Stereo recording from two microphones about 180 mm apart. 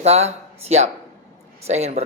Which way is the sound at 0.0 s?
35° right (ahead or behind).